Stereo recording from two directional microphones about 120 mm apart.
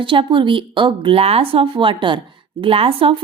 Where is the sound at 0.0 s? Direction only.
45° right (ahead or behind).